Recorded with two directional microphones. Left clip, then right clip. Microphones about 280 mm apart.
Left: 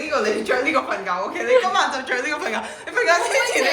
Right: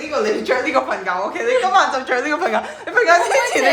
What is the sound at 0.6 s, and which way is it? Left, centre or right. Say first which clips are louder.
A woman's voice: right 3 dB; right.